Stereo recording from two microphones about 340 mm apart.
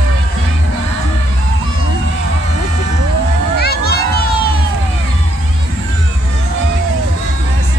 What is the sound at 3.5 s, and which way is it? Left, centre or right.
Crowd, left.